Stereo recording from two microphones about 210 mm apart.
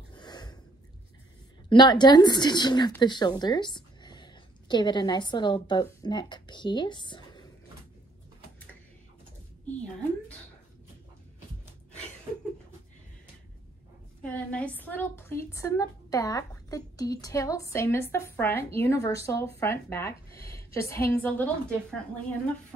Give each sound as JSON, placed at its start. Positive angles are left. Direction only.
{"t": 0.1, "sound": "snort", "side_deg": 20}
{"t": 1.7, "sound": "a woman's voice", "side_deg": 20}
{"t": 14.2, "sound": "a woman's voice", "side_deg": 5}
{"t": 20.4, "sound": "a sound", "side_deg": 15}
{"t": 21.1, "sound": "a woman's voice", "side_deg": 10}